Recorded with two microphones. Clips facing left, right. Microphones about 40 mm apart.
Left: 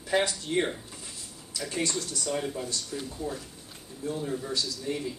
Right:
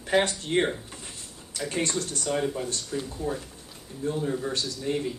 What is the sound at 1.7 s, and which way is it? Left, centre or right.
A man's voice, right.